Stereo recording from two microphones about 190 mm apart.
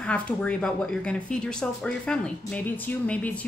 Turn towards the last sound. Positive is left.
turn(degrees=10)  # may be behind; listen again after turning